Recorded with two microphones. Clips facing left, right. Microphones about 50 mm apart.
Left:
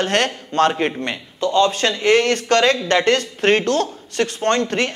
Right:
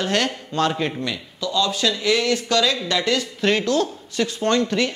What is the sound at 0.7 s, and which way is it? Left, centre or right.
Speech, left.